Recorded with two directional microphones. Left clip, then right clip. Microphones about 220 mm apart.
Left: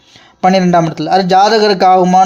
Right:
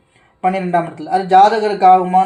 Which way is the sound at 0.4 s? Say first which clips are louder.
Left 6 dB; 45° left (ahead or behind).